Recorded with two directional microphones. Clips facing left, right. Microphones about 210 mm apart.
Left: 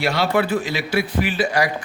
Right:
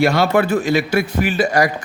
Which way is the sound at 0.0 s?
45° right (ahead or behind).